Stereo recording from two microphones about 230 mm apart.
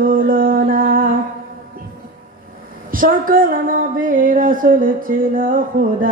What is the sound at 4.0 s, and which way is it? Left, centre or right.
Music, right.